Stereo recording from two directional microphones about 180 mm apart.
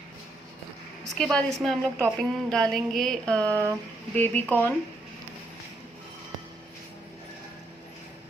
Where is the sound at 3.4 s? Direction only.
15° right (ahead or behind).